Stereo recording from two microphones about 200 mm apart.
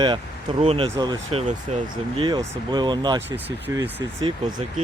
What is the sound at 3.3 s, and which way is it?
Speech, 10° right (ahead or behind).